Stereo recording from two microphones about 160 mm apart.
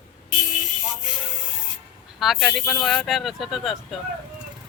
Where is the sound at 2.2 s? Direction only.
Centre (ahead or behind).